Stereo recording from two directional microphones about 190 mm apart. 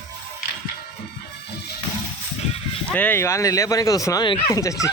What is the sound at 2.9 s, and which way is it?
Speech, 10° left (ahead or behind).